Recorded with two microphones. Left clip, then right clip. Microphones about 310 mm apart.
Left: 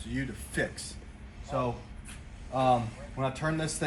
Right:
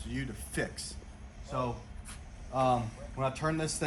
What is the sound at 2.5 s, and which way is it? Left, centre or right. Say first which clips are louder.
A man's voice: left 3 dB; right.